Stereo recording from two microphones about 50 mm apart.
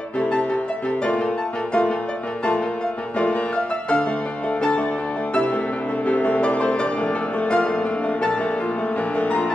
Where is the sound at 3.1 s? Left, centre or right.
Left.